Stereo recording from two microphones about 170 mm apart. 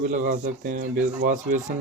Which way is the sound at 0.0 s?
50° right (ahead or behind).